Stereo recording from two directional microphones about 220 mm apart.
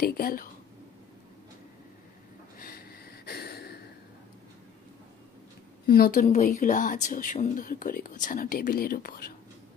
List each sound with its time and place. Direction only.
0.0 s speech: 40° left (ahead or behind)
3.3 s gasp: 45° left (ahead or behind)
5.9 s speech: 40° left (ahead or behind)